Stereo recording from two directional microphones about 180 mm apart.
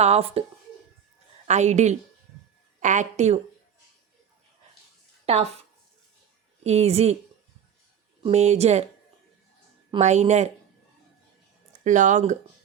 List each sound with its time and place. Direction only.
0.0 s a woman's voice: 35° right (ahead or behind)
1.5 s a woman's voice: 40° right (ahead or behind)
5.2 s speech: 35° right (ahead or behind)
6.6 s a woman's voice: 35° right (ahead or behind)
8.2 s a woman's voice: 40° right (ahead or behind)
10.0 s a woman's voice: 40° right (ahead or behind)
11.8 s speech: 45° right (ahead or behind)